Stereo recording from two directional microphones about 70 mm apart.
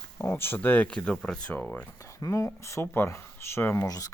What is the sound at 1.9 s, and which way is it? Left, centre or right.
Speech, left.